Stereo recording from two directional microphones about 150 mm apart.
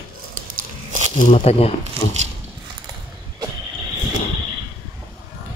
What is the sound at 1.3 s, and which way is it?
Speech, 45° left (ahead or behind).